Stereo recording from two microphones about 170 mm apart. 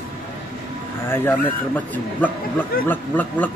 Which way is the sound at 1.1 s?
10° left (ahead or behind).